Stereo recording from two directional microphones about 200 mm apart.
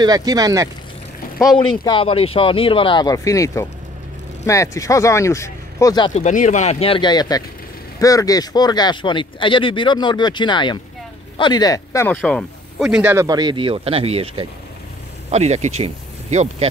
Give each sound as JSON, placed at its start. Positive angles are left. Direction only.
{"t": 0.0, "sound": "speech", "side_deg": -20}
{"t": 1.9, "sound": "speech", "side_deg": 25}
{"t": 6.2, "sound": "speech", "side_deg": 40}
{"t": 12.2, "sound": "speech", "side_deg": 0}